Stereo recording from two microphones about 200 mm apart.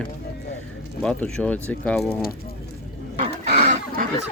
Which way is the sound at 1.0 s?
5° left (ahead or behind).